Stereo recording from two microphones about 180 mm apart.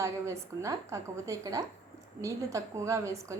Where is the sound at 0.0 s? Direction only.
15° right (ahead or behind).